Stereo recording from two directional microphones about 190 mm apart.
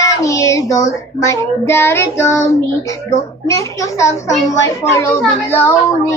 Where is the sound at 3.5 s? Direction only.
15° left (ahead or behind).